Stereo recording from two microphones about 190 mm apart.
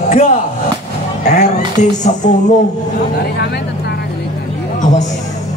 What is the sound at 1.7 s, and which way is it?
Music, 40° left (ahead or behind).